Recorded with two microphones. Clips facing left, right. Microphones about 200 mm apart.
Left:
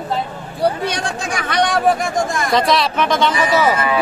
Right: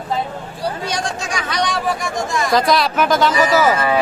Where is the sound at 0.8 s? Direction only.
60° left (ahead or behind).